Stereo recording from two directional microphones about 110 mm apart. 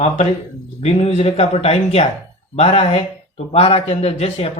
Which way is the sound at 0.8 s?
80° left.